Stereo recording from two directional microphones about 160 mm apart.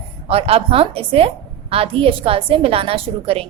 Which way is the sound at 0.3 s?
40° right (ahead or behind).